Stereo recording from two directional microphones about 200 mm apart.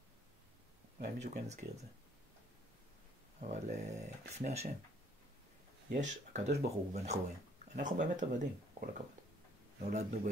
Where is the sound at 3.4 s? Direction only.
35° right (ahead or behind).